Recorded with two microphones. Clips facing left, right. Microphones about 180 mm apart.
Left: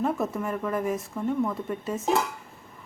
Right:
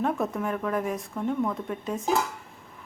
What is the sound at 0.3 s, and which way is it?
A woman's voice, centre (ahead or behind).